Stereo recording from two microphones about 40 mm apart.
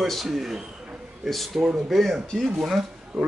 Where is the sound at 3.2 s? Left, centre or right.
Right.